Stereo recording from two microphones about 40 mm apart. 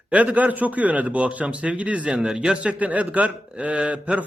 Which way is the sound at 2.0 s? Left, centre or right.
Centre.